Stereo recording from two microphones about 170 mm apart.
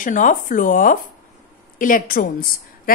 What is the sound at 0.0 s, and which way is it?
A woman's voice, 50° left (ahead or behind).